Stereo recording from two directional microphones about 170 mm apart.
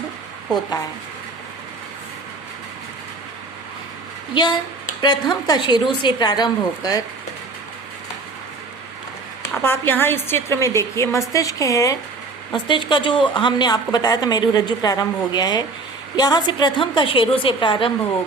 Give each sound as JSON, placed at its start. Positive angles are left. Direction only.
{"t": 5.0, "sound": "speech", "side_deg": 25}
{"t": 9.6, "sound": "a woman's voice", "side_deg": 15}